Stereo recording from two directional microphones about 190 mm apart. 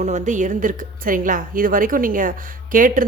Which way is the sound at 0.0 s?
40° right (ahead or behind).